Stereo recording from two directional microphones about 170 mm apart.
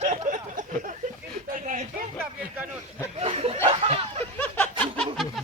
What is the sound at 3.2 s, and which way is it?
Snicker, 35° right (ahead or behind).